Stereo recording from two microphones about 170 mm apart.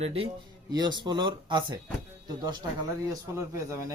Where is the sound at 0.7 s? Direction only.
25° right (ahead or behind).